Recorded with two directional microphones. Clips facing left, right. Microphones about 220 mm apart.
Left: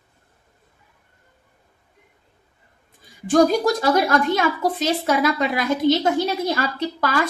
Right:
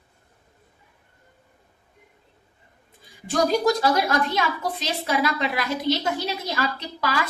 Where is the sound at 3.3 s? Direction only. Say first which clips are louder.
Left 4 dB; 50° left (ahead or behind).